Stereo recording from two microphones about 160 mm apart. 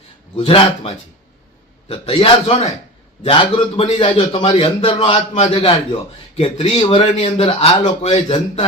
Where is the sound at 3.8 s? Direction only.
35° left (ahead or behind).